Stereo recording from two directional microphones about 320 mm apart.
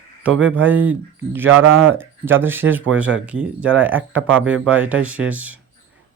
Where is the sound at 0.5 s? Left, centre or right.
Centre.